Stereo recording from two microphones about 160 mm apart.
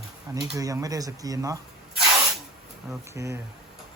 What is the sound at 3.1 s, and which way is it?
Speech, 20° right (ahead or behind).